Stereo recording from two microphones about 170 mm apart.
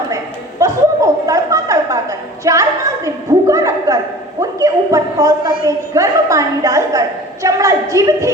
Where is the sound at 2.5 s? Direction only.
20° right (ahead or behind).